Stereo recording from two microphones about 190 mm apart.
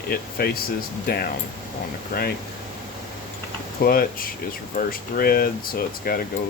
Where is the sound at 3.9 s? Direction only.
50° left (ahead or behind).